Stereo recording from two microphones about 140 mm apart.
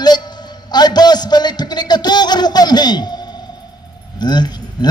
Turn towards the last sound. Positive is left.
turn(degrees=30)  # may be behind; listen again after turning